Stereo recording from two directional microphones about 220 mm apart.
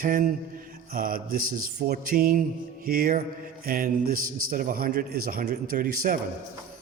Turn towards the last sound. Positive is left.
turn(degrees=-40)  # may be behind; listen again after turning